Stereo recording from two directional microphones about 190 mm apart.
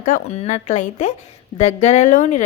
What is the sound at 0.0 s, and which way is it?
A woman's voice, 40° left (ahead or behind).